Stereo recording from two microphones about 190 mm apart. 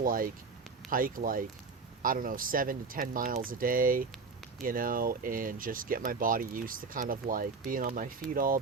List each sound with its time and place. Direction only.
0.0 s speech: 50° right (ahead or behind)